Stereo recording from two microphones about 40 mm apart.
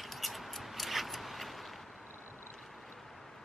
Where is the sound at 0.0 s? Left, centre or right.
Centre.